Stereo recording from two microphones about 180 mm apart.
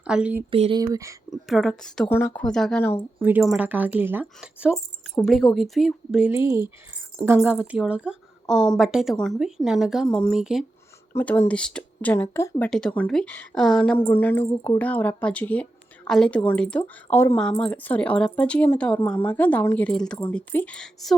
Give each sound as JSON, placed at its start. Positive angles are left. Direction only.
{"t": 0.1, "sound": "speech", "side_deg": -5}
{"t": 0.5, "sound": "speech", "side_deg": -30}
{"t": 1.5, "sound": "a woman's voice", "side_deg": 0}
{"t": 3.2, "sound": "a woman's voice", "side_deg": -10}
{"t": 6.3, "sound": "a woman's voice", "side_deg": -15}
{"t": 11.1, "sound": "speech", "side_deg": 15}